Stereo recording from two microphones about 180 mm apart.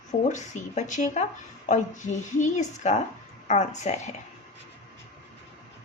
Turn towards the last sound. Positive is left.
turn(degrees=40)  # may be behind; listen again after turning